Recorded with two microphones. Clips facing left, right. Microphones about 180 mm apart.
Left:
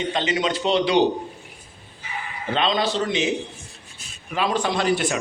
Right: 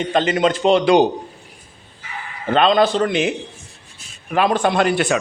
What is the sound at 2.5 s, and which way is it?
A man's voice, 55° right (ahead or behind).